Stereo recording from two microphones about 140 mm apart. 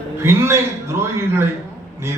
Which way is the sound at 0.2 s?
20° right (ahead or behind).